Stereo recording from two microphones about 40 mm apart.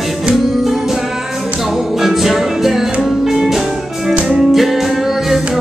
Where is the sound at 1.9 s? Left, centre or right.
Centre.